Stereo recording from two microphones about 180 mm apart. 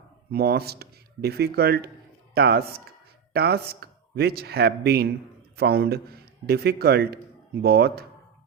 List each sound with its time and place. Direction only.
0.3 s speech: 60° right (ahead or behind)